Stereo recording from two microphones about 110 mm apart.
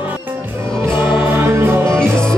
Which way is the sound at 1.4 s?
20° right (ahead or behind).